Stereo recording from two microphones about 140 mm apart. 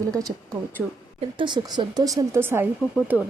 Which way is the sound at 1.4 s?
35° right (ahead or behind).